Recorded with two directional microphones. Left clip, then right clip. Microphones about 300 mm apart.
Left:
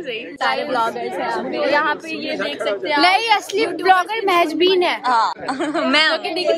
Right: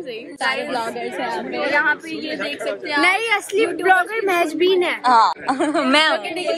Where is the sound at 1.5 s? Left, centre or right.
Left.